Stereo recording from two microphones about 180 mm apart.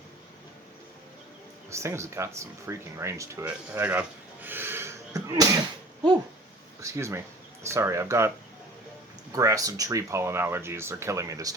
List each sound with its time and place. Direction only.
1.7 s speech: 15° right (ahead or behind)
4.4 s a sound: 10° right (ahead or behind)
6.8 s speech: 15° right (ahead or behind)
9.3 s speech: 20° right (ahead or behind)